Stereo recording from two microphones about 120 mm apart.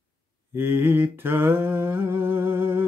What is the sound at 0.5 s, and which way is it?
Mantra, 20° right (ahead or behind).